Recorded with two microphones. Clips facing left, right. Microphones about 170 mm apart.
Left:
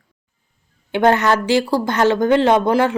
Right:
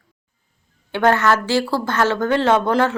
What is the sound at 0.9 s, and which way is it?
Speech, 20° left (ahead or behind).